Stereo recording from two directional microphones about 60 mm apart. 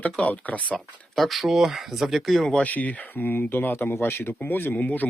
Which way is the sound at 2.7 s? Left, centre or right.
Left.